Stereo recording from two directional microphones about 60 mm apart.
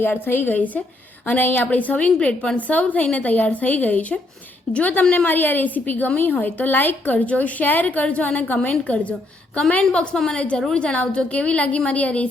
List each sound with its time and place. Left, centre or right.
0.0 s a woman's voice: left